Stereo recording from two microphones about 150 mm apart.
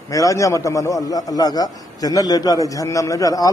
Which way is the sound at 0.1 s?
20° left (ahead or behind).